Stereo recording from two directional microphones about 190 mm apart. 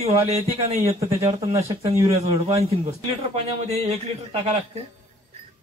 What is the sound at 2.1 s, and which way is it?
A man's voice, 35° right (ahead or behind).